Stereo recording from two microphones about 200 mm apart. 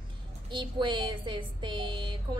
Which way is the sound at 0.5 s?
25° right (ahead or behind).